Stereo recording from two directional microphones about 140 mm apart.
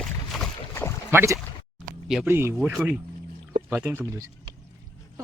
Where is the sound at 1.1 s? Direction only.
15° right (ahead or behind).